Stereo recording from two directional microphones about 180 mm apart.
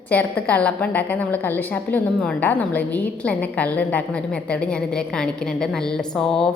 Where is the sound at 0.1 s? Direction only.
10° left (ahead or behind).